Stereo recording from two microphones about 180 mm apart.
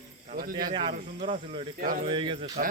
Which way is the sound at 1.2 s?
45° right (ahead or behind).